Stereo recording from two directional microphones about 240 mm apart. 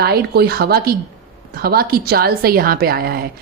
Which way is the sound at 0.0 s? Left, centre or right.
Right.